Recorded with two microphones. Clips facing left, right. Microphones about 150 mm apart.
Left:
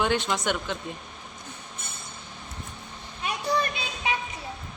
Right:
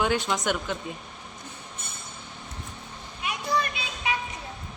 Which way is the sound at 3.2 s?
35° left (ahead or behind).